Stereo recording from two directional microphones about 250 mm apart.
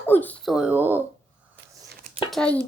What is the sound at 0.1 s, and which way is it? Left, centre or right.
Speech, centre.